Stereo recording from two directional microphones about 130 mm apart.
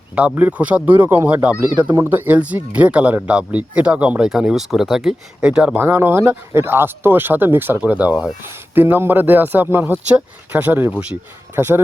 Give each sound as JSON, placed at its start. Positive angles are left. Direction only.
{"t": 0.2, "sound": "speech", "side_deg": -10}